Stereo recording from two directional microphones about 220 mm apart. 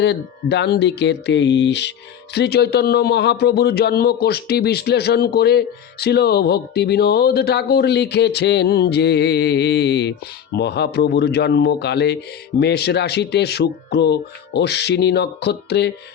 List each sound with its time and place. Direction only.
0.0 s a man's voice: 50° left (ahead or behind)